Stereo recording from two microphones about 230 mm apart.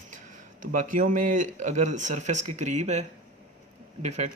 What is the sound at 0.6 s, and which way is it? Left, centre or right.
Speech, right.